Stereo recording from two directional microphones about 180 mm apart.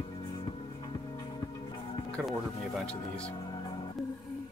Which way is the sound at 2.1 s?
Centre (ahead or behind).